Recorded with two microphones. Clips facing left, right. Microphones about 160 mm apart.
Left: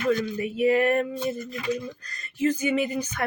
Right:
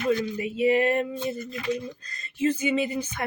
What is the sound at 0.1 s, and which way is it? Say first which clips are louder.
Speech: even; 20° right (ahead or behind).